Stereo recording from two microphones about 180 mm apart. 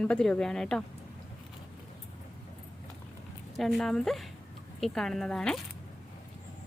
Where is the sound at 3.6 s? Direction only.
Centre (ahead or behind).